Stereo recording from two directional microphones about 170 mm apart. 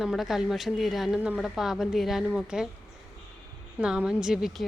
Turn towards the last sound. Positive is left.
turn(degrees=-5)  # may be behind; listen again after turning